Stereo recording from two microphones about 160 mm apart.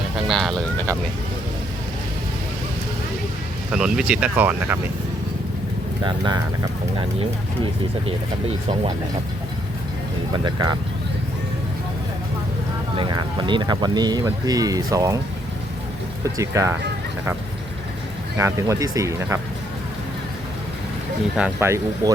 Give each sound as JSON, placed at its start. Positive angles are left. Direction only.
{"t": 0.3, "sound": "speech", "side_deg": 0}
{"t": 3.7, "sound": "speech", "side_deg": -5}
{"t": 6.1, "sound": "speech", "side_deg": -30}
{"t": 10.3, "sound": "speech", "side_deg": -30}
{"t": 13.0, "sound": "speech", "side_deg": -30}
{"t": 16.2, "sound": "speech", "side_deg": -20}
{"t": 18.3, "sound": "speech", "side_deg": -20}
{"t": 21.6, "sound": "speech", "side_deg": -15}